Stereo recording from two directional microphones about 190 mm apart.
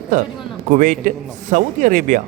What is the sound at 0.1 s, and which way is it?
A man's voice, 40° right (ahead or behind).